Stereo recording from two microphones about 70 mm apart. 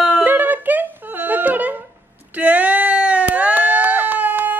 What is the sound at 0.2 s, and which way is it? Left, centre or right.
Humming, right.